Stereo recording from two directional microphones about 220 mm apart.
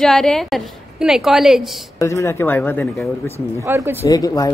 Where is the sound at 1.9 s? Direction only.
15° left (ahead or behind).